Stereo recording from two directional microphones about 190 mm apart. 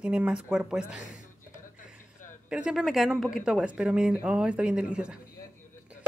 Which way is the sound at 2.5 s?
5° right (ahead or behind).